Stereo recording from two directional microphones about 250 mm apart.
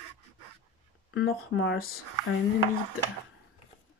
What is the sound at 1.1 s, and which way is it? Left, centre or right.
Speech, left.